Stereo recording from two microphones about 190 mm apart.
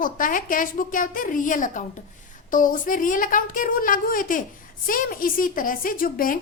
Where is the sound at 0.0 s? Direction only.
45° left (ahead or behind).